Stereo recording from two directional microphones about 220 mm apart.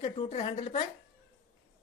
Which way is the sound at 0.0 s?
25° left (ahead or behind).